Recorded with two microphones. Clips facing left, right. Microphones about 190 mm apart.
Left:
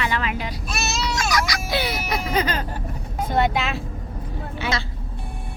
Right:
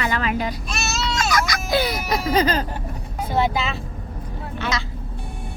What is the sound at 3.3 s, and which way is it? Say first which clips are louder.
Speech: even; centre (ahead or behind).